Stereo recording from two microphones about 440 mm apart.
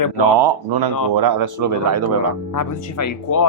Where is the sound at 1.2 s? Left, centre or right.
Right.